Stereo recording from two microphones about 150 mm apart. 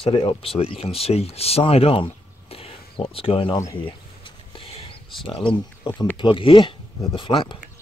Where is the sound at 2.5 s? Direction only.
40° left (ahead or behind).